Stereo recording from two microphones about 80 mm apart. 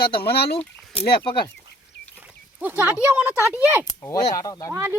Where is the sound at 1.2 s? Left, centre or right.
Left.